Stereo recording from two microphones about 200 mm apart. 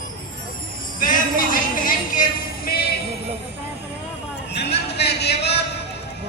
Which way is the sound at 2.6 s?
55° left (ahead or behind).